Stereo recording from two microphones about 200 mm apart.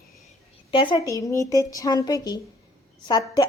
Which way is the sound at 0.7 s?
25° left (ahead or behind).